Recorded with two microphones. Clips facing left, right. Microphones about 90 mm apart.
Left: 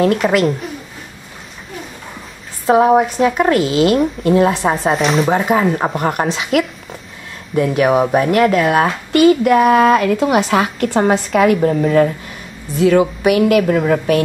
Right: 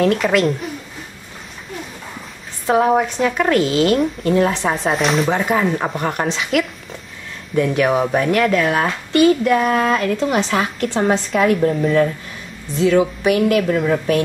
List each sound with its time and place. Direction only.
0.0 s a woman's voice: 5° left (ahead or behind)
2.6 s a woman's voice: 10° left (ahead or behind)